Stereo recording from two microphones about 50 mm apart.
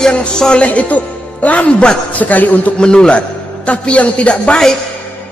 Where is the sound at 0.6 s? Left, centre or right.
Left.